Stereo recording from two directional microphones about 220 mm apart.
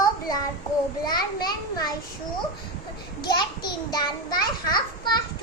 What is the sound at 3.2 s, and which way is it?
A child's voice, 20° left (ahead or behind).